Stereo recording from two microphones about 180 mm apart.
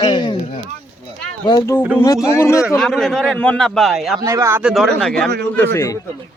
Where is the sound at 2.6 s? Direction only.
Centre (ahead or behind).